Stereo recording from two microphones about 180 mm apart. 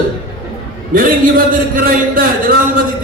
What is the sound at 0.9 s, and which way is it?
A man's voice, 55° right (ahead or behind).